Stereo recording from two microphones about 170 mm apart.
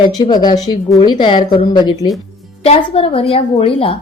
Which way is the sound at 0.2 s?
25° left (ahead or behind).